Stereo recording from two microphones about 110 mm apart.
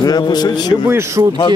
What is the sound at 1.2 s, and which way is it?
Speech, 35° right (ahead or behind).